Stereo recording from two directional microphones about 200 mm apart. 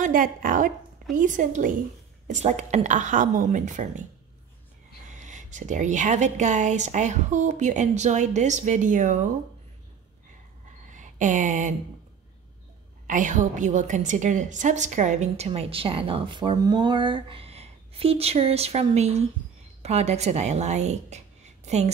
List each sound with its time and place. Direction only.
0.0 s a woman's voice: 45° right (ahead or behind)
5.1 s a woman's voice: 35° right (ahead or behind)
10.9 s a sound: 40° right (ahead or behind)
13.0 s a woman's voice: 40° right (ahead or behind)